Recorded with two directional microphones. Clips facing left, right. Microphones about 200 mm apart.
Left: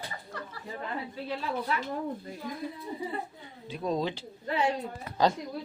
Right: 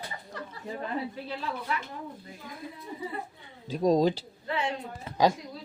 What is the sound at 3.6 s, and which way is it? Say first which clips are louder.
Speech: right 7 dB; 40° right (ahead or behind).